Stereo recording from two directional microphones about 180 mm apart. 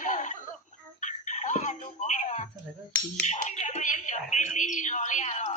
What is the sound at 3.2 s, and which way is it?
Speech, 40° left (ahead or behind).